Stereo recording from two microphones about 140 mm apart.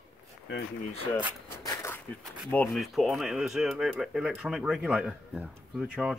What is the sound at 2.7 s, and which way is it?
Speech, centre (ahead or behind).